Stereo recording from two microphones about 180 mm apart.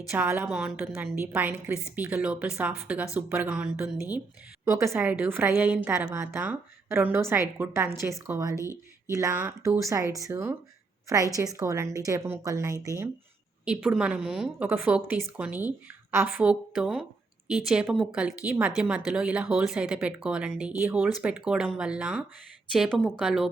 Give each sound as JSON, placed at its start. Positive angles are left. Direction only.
{"t": 0.1, "sound": "a woman's voice", "side_deg": -10}
{"t": 8.5, "sound": "speech", "side_deg": 15}
{"t": 9.0, "sound": "a woman's voice", "side_deg": -15}
{"t": 13.7, "sound": "a woman's voice", "side_deg": -5}